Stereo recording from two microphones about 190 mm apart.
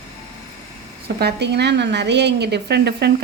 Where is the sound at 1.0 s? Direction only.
60° right (ahead or behind).